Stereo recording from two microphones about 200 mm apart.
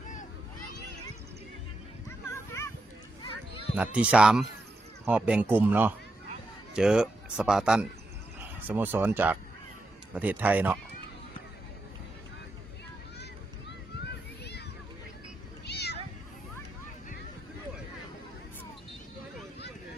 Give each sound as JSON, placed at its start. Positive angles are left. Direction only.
{"t": 2.3, "sound": "a sound", "side_deg": 15}
{"t": 3.8, "sound": "speech", "side_deg": -5}
{"t": 15.6, "sound": "cat", "side_deg": 55}